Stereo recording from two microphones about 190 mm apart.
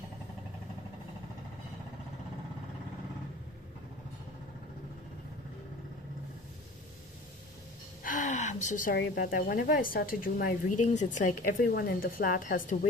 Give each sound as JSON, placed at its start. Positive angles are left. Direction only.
{"t": 8.0, "sound": "gasp", "side_deg": 45}
{"t": 9.0, "sound": "a woman's voice", "side_deg": 50}